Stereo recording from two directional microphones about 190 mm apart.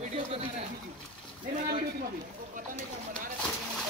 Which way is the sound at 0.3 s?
30° right (ahead or behind).